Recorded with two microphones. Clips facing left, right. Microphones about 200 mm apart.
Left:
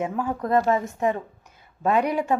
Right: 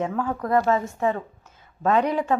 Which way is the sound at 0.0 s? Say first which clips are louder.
Even; 20° left (ahead or behind).